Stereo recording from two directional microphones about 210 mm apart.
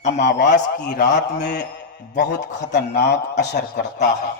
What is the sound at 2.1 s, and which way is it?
A man's voice, 55° left (ahead or behind).